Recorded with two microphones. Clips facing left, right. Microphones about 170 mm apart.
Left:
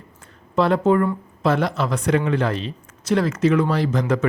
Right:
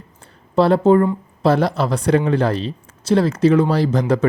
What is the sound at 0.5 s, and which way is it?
A man's voice, 35° right (ahead or behind).